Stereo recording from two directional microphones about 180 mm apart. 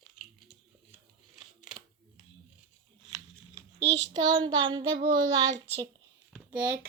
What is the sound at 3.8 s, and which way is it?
Child singing, 75° right (ahead or behind).